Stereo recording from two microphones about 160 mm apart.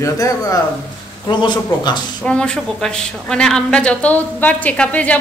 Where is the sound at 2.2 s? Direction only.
5° left (ahead or behind).